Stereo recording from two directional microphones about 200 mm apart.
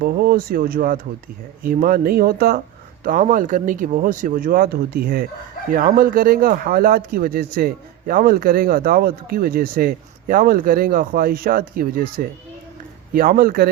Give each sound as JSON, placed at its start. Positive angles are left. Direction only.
{"t": 0.0, "sound": "speech", "side_deg": -45}
{"t": 13.1, "sound": "speech", "side_deg": -45}